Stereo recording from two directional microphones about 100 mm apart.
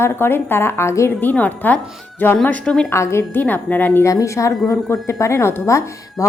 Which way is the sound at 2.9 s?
25° left (ahead or behind).